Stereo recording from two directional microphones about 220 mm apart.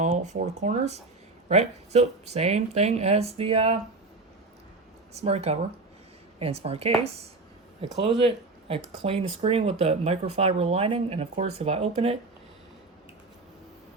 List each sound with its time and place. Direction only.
0.0 s speech: 30° right (ahead or behind)
5.1 s speech: 30° right (ahead or behind)